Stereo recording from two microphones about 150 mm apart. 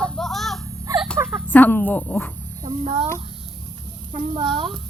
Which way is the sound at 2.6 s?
40° right (ahead or behind).